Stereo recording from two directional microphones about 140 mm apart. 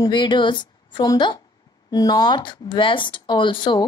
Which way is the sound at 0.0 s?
30° left (ahead or behind).